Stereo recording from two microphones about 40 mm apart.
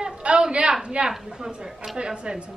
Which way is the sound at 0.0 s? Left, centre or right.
Right.